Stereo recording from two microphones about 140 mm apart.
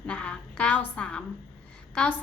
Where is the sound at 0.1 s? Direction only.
10° left (ahead or behind).